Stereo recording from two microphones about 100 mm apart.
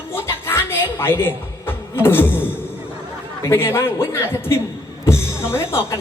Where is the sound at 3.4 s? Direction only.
25° left (ahead or behind).